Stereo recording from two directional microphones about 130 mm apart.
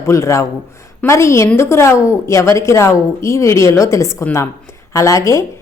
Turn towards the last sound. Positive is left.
turn(degrees=25)  # may be behind; listen again after turning